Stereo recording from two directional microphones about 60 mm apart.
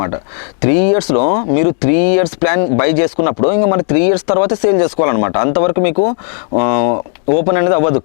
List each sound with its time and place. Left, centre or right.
0.6 s speech: left